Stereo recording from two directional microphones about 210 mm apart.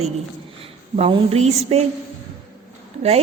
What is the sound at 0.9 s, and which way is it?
Speech, 30° right (ahead or behind).